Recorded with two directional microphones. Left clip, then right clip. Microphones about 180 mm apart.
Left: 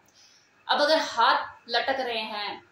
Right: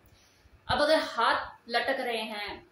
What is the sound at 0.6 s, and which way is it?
A woman's voice, 15° right (ahead or behind).